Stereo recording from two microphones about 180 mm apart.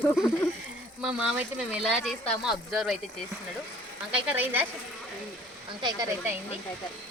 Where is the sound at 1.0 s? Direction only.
5° right (ahead or behind).